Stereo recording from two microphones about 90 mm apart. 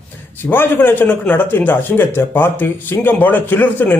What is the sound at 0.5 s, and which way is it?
A man's voice, 20° left (ahead or behind).